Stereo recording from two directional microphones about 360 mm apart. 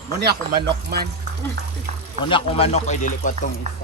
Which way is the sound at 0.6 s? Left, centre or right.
Right.